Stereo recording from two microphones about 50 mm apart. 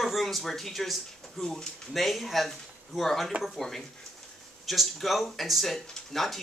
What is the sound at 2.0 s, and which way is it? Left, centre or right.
Speech, centre.